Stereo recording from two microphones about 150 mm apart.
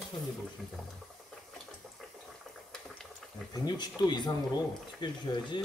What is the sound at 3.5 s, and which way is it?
Speech, 30° left (ahead or behind).